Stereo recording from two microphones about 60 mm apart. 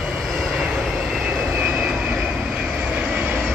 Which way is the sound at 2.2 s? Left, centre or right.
Centre.